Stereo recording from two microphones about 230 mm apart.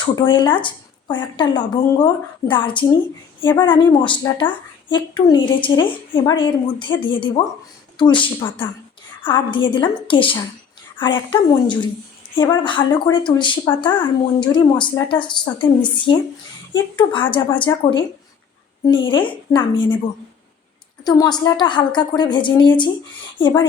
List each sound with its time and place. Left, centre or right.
0.0 s a woman's voice: left
21.0 s a woman's voice: centre